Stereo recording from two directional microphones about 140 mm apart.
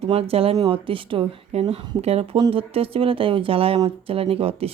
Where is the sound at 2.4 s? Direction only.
30° right (ahead or behind).